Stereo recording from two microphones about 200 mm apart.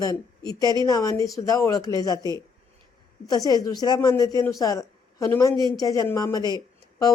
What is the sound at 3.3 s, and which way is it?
A woman's voice, 20° left (ahead or behind).